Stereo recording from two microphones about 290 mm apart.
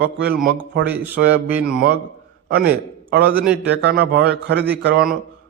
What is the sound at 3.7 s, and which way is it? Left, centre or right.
A man's voice, right.